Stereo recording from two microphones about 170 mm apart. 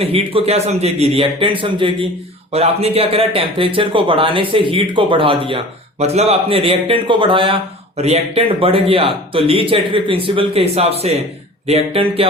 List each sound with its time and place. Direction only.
0.0 s speech: 35° right (ahead or behind)